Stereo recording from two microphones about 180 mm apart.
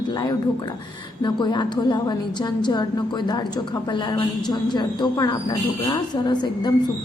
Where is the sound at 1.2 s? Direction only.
25° left (ahead or behind).